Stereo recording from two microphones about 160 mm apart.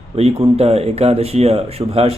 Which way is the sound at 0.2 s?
35° right (ahead or behind).